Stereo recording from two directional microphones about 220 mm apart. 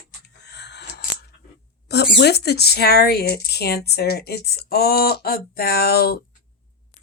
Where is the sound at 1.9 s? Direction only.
50° left (ahead or behind).